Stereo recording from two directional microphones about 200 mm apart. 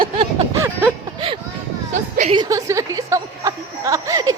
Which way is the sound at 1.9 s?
35° right (ahead or behind).